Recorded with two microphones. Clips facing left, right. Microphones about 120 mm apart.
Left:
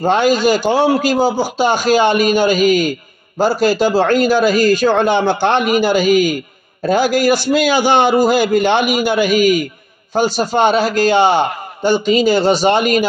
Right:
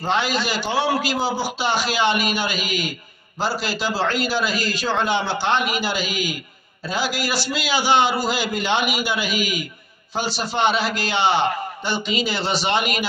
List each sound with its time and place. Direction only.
0.0 s a man's voice: 45° left (ahead or behind)